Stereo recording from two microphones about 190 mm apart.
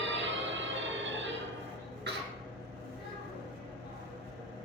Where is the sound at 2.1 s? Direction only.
60° right (ahead or behind).